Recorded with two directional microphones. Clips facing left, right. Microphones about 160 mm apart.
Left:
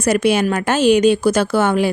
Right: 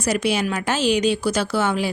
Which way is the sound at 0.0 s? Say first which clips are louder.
Left 6 dB; 55° left (ahead or behind).